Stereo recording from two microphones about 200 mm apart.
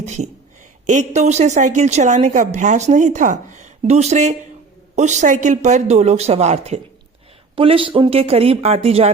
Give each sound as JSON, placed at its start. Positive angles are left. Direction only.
{"t": 0.0, "sound": "a woman's voice", "side_deg": -35}